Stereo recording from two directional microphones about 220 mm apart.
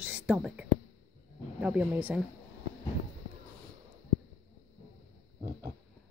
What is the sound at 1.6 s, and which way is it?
Speech, 5° right (ahead or behind).